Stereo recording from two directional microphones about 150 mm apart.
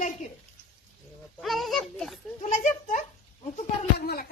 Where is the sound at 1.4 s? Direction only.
Centre (ahead or behind).